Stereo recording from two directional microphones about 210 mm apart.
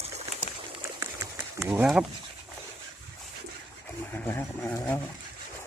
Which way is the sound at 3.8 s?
10° left (ahead or behind).